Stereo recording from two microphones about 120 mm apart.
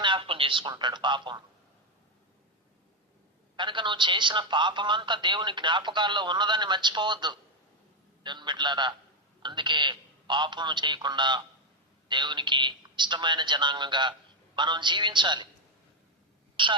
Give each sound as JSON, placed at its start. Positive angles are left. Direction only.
{"t": 0.0, "sound": "a man's voice", "side_deg": -45}
{"t": 3.5, "sound": "a man's voice", "side_deg": -40}
{"t": 16.6, "sound": "a woman's voice", "side_deg": -40}